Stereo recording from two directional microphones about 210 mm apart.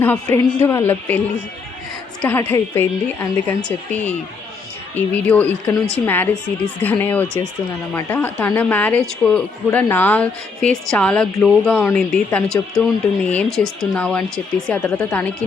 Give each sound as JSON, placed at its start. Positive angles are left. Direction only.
{"t": 0.0, "sound": "speech", "side_deg": 10}
{"t": 2.2, "sound": "speech", "side_deg": 10}